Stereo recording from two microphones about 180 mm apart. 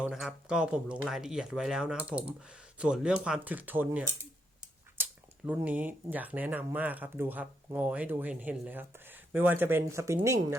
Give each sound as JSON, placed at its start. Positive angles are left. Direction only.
{"t": 0.0, "sound": "speech", "side_deg": 0}
{"t": 5.0, "sound": "a sound", "side_deg": -10}
{"t": 5.5, "sound": "speech", "side_deg": -10}